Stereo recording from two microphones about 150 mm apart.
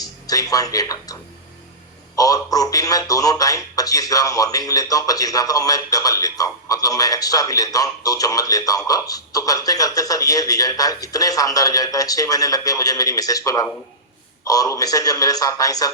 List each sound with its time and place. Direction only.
0.0 s speech: 25° left (ahead or behind)
2.1 s speech: 25° left (ahead or behind)